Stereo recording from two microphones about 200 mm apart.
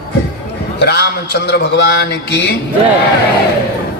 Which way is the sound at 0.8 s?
55° left (ahead or behind).